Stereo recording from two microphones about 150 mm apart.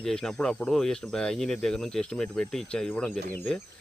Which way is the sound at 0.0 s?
5° left (ahead or behind).